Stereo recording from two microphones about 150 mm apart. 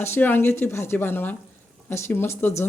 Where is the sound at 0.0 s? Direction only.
15° left (ahead or behind).